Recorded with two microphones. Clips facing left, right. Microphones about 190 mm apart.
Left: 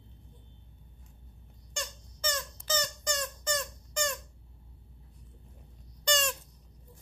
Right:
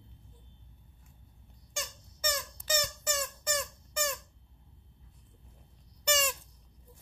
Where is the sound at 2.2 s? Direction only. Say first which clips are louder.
Even; 10° right (ahead or behind).